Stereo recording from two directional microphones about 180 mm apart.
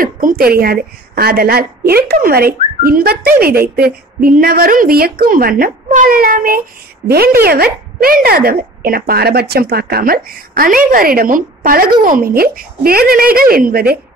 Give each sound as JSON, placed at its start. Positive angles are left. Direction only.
{"t": 0.0, "sound": "a woman's voice", "side_deg": -50}